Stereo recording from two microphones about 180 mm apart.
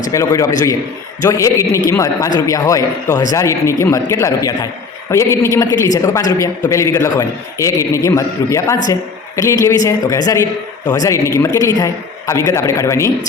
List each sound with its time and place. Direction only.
0.1 s a man's voice: 15° left (ahead or behind)